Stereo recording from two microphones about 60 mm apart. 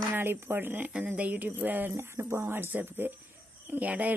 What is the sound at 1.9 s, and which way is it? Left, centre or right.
Speech, right.